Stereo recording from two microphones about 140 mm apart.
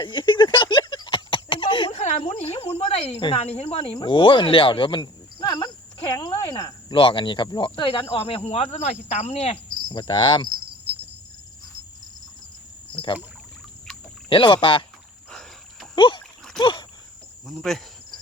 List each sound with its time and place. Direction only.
0.0 s a sound: 35° left (ahead or behind)
2.0 s cricket: 50° left (ahead or behind)
3.9 s speech: 35° left (ahead or behind)
8.1 s cricket: 45° left (ahead or behind)
9.9 s cricket: 35° left (ahead or behind)
12.9 s speech: 35° left (ahead or behind)
14.3 s cricket: 35° left (ahead or behind)
15.3 s cricket: 5° left (ahead or behind)
16.0 s cricket: 35° left (ahead or behind)
17.4 s speech: centre (ahead or behind)